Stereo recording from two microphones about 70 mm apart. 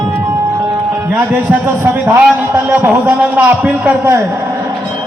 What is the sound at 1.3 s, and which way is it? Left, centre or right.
A man's voice, right.